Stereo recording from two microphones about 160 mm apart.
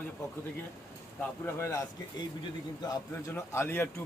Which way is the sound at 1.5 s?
15° left (ahead or behind).